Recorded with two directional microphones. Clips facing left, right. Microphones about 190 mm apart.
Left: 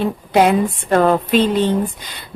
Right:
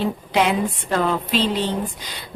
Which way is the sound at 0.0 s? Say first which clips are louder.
Left 5 dB; 50° left (ahead or behind).